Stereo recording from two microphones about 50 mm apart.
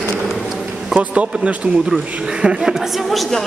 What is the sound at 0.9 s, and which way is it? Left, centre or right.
Speech, right.